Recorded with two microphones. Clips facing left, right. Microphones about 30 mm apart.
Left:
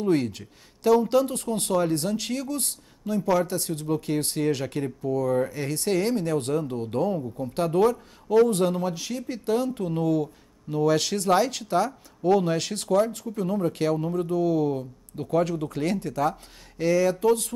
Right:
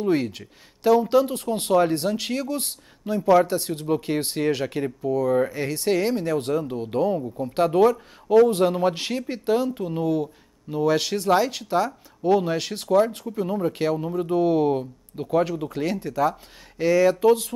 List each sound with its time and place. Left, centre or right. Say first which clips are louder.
0.0 s speech: right 1 dB; centre
8.9 s speech: right 4 dB; right
9.5 s speech: right 2 dB; centre
13.0 s speech: right 2 dB; right
14.3 s speech: right 5 dB; right
15.1 s speech: right 2 dB; centre